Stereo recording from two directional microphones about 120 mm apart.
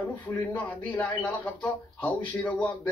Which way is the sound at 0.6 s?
15° left (ahead or behind).